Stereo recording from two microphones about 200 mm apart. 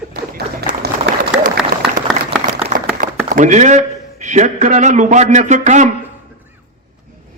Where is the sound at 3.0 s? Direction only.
40° right (ahead or behind).